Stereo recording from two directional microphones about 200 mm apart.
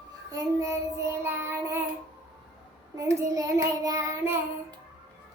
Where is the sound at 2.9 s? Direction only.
15° right (ahead or behind).